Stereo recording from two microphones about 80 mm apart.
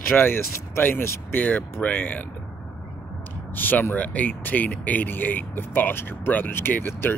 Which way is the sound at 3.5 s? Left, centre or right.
Left.